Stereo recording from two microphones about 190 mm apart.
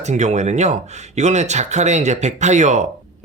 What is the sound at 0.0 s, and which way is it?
A man's voice, 35° right (ahead or behind).